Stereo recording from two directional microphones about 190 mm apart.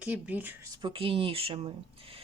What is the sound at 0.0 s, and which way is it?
Speech, 5° right (ahead or behind).